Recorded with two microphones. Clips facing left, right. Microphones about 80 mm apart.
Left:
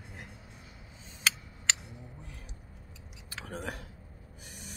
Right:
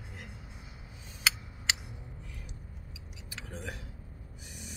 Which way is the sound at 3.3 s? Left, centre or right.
Left.